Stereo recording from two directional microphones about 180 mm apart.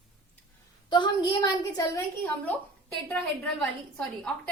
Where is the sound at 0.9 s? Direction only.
25° left (ahead or behind).